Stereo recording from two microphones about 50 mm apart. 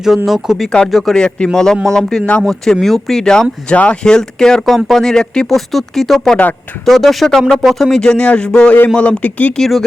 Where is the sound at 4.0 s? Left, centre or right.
Centre.